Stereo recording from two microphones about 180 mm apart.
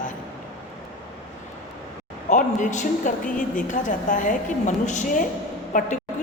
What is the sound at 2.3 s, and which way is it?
A woman's voice, 45° left (ahead or behind).